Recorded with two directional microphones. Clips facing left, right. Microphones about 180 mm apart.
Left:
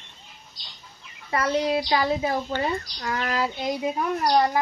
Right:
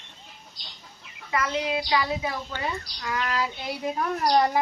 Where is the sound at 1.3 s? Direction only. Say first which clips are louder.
Left 4 dB; 35° left (ahead or behind).